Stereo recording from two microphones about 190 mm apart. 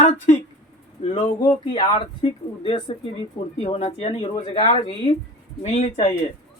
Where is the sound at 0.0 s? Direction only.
35° left (ahead or behind).